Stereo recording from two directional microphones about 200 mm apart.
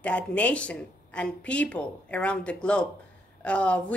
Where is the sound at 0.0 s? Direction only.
5° left (ahead or behind).